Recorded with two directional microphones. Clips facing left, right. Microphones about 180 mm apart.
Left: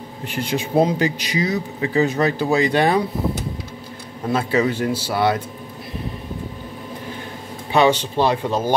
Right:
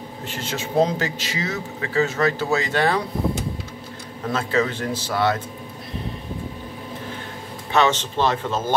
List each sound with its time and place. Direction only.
0.3 s a man's voice: 15° left (ahead or behind)
4.3 s a man's voice: 10° left (ahead or behind)
7.7 s a man's voice: 10° left (ahead or behind)